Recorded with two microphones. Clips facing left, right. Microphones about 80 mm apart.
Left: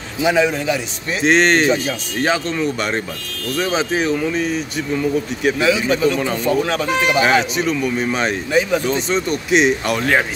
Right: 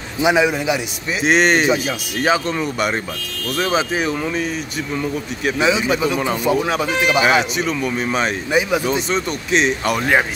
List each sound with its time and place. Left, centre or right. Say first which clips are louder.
0.2 s speech: even; centre
5.6 s speech: right 1 dB; centre
8.5 s speech: left 1 dB; centre
9.5 s speech: left 2 dB; centre
9.9 s speech: even; centre